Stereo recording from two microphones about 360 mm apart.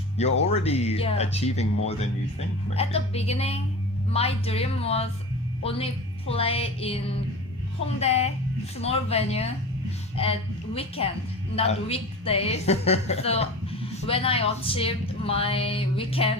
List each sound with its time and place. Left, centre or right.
0.2 s speech: centre